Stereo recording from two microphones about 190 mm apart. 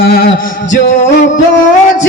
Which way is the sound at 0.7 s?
65° left (ahead or behind).